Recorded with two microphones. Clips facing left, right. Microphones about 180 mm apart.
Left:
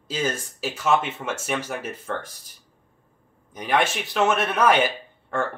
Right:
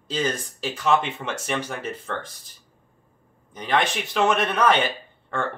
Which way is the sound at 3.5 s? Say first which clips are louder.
Left 1 dB; 10° left (ahead or behind).